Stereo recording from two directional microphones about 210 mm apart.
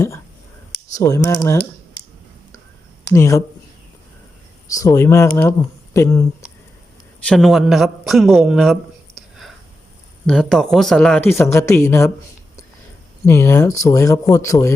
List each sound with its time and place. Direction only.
0.9 s speech: 15° left (ahead or behind)
3.1 s speech: 15° left (ahead or behind)
4.7 s speech: 15° left (ahead or behind)
7.3 s a man's voice: centre (ahead or behind)
13.2 s speech: 15° left (ahead or behind)